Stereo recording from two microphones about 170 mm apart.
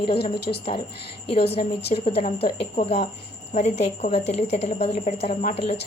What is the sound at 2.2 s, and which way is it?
Speech, 60° left (ahead or behind).